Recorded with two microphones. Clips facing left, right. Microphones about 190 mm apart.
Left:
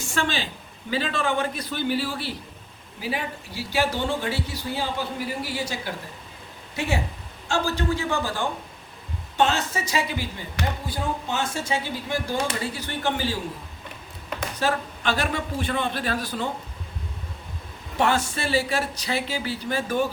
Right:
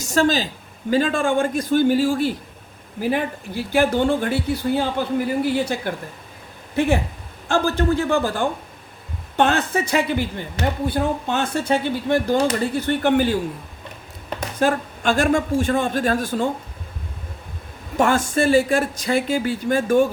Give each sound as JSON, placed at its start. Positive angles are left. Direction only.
{"t": 0.0, "sound": "speech", "side_deg": -40}
{"t": 9.4, "sound": "speech", "side_deg": -55}
{"t": 14.6, "sound": "speech", "side_deg": -45}
{"t": 17.9, "sound": "speech", "side_deg": -50}